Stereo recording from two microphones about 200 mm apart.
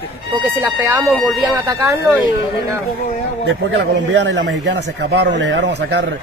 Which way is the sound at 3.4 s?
60° right (ahead or behind).